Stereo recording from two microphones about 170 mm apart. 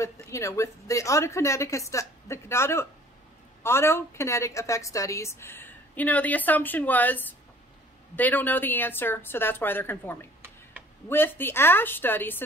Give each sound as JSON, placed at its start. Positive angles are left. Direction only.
{"t": 0.0, "sound": "a woman's voice", "side_deg": 15}